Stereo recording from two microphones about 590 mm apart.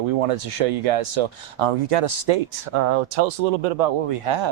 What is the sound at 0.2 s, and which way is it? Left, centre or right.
Speech, right.